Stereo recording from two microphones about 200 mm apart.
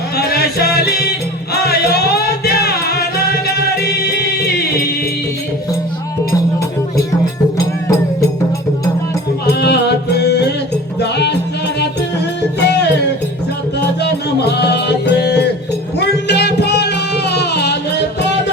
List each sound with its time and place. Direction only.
0.3 s music: 50° left (ahead or behind)
9.6 s music: 55° left (ahead or behind)
12.4 s music: 55° left (ahead or behind)
14.0 s music: 55° left (ahead or behind)